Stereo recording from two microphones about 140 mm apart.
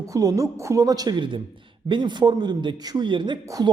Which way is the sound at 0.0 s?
25° right (ahead or behind).